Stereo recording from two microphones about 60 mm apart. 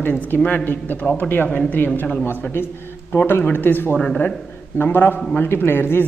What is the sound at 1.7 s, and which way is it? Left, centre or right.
A man's voice, left.